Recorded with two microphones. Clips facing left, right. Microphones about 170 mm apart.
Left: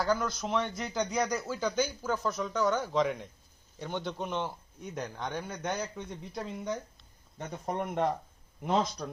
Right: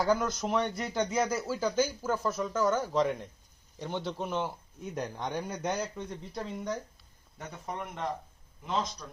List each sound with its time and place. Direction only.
0.0 s speech: 20° right (ahead or behind)
0.3 s speech: centre (ahead or behind)
5.7 s speech: centre (ahead or behind)
7.6 s speech: 45° left (ahead or behind)
8.6 s a man's voice: 60° left (ahead or behind)